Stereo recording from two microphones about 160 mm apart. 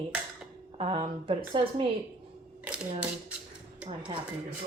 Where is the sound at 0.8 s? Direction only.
35° right (ahead or behind).